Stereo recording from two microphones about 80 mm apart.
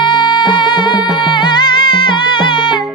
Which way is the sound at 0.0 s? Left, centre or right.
Left.